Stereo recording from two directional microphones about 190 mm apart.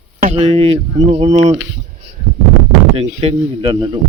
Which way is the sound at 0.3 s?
35° right (ahead or behind).